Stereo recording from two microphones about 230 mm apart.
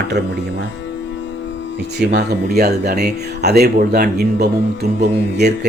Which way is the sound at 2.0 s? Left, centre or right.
Right.